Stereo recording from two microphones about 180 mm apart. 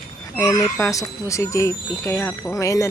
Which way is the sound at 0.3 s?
20° left (ahead or behind).